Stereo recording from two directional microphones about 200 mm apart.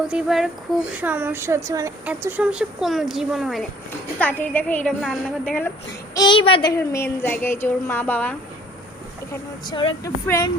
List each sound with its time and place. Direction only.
0.1 s a woman's voice: 5° right (ahead or behind)
6.1 s speech: 25° left (ahead or behind); by 8.4 s 10° left (ahead or behind)
9.3 s speech: 25° left (ahead or behind)